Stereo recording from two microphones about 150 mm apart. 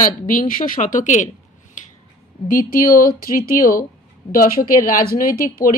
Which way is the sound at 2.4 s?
65° left (ahead or behind).